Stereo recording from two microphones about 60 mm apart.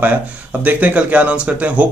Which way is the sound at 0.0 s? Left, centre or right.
Right.